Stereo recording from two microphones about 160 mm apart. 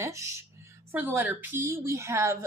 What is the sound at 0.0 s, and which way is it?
Speech, 20° right (ahead or behind).